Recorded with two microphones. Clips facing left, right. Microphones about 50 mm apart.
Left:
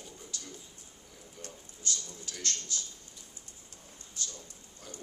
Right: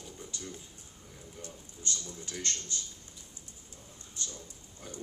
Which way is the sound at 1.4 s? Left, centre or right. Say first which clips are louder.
Left 1 dB; right.